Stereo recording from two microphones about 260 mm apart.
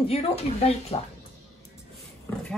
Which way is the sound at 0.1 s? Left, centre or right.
Left.